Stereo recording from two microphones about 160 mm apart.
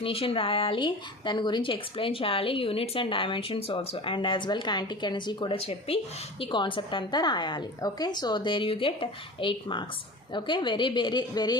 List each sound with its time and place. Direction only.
0.0 s a woman's voice: 35° left (ahead or behind)